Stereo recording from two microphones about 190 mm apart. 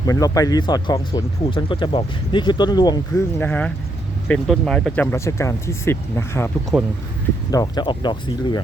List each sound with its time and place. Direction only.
0.0 s speech: 20° left (ahead or behind)
6.7 s speech: centre (ahead or behind)
7.5 s speech: 20° left (ahead or behind)